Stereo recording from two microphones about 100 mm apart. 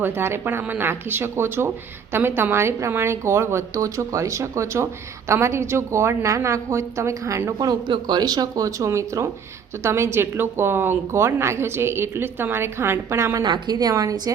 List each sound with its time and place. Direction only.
0.0 s a woman's voice: 25° right (ahead or behind)
7.6 s a woman's voice: 45° right (ahead or behind); by 13.4 s 25° right (ahead or behind)
13.4 s speech: 45° right (ahead or behind)